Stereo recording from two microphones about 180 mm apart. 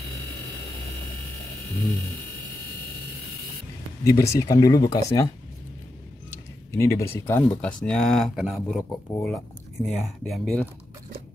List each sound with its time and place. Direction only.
4.0 s speech: 15° left (ahead or behind)
6.7 s speech: 15° left (ahead or behind); by 8.8 s centre (ahead or behind)
8.8 s speech: 15° left (ahead or behind)
9.8 s speech: centre (ahead or behind)